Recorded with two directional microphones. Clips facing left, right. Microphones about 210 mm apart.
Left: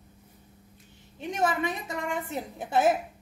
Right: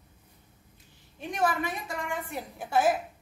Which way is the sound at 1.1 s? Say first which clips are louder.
Left 1 dB; 20° left (ahead or behind).